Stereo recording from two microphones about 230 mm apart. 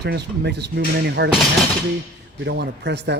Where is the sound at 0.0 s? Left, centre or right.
Right.